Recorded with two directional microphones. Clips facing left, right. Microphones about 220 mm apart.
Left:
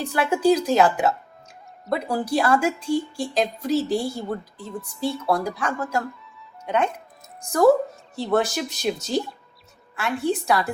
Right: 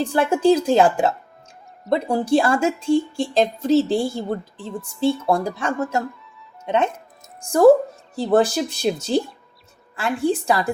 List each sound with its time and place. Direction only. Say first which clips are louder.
0.0 s a woman's voice: right 3 dB; 30° right (ahead or behind)
8.1 s speech: right 5 dB; 35° right (ahead or behind)